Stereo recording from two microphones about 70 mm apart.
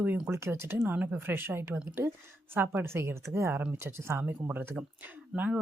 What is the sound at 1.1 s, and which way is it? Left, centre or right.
A woman's voice, right.